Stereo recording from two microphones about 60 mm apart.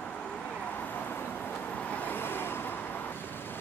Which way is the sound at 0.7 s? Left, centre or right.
Left.